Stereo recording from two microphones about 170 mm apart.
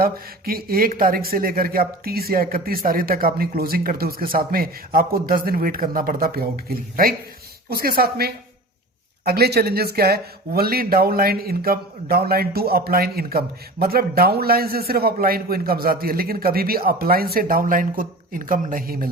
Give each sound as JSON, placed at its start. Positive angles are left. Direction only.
{"t": 0.0, "sound": "speech", "side_deg": -60}
{"t": 7.7, "sound": "speech", "side_deg": -60}